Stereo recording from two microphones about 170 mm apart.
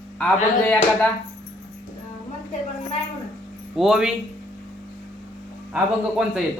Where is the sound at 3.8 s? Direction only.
5° right (ahead or behind).